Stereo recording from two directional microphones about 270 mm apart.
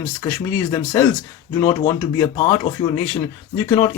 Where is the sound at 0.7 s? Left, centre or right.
Centre.